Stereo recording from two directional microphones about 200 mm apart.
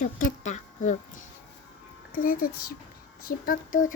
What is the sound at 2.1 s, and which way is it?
A woman's voice, 45° left (ahead or behind).